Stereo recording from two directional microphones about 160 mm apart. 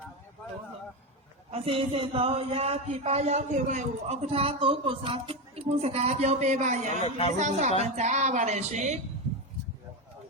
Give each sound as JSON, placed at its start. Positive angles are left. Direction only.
{"t": 1.5, "sound": "speech", "side_deg": -35}
{"t": 7.0, "sound": "speech", "side_deg": 40}
{"t": 7.3, "sound": "a woman's voice", "side_deg": -50}